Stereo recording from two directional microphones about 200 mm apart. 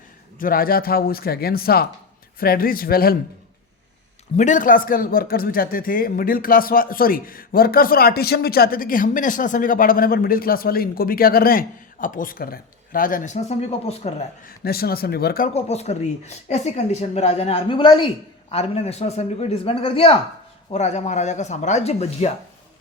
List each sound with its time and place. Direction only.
0.3 s a man's voice: 45° left (ahead or behind)
4.4 s a man's voice: 40° left (ahead or behind)
14.4 s a man's voice: 50° left (ahead or behind)
15.5 s speech: 30° left (ahead or behind)